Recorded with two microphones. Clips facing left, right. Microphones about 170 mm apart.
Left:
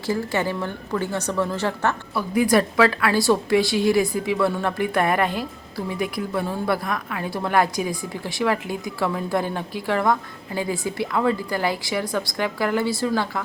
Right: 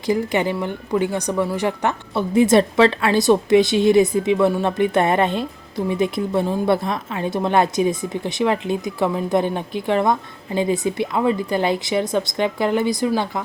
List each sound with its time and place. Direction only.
0.0 s speech: 15° right (ahead or behind)